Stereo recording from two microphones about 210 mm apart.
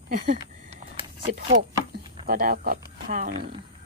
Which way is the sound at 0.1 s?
40° right (ahead or behind).